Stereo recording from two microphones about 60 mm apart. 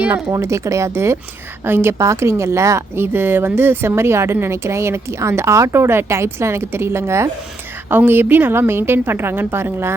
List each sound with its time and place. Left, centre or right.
0.3 s a woman's voice: right
2.0 s speech: right
7.9 s a woman's voice: right